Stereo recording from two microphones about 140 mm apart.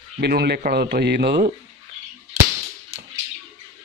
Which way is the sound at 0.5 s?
90° right.